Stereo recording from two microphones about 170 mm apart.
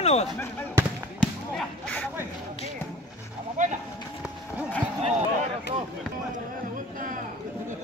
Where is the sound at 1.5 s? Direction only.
5° left (ahead or behind).